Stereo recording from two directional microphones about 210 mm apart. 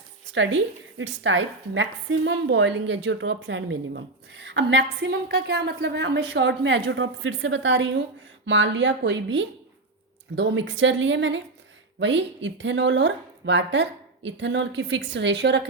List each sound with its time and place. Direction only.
0.3 s a woman's voice: 60° right (ahead or behind)